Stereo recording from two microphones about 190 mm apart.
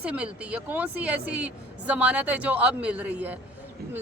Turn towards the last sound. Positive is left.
turn(degrees=-5)  # may be behind; listen again after turning